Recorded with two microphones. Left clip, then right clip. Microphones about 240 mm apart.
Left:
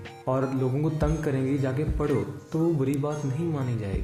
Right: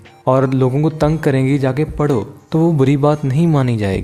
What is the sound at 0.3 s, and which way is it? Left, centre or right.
Speech, right.